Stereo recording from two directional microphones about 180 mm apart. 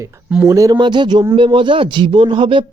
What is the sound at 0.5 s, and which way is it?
Speech, 20° right (ahead or behind).